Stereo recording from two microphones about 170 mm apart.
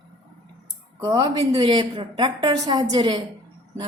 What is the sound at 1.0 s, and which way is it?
A woman's voice, 20° right (ahead or behind).